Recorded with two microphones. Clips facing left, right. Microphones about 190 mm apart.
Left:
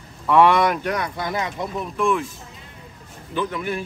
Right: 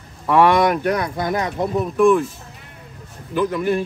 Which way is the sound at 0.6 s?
45° right (ahead or behind).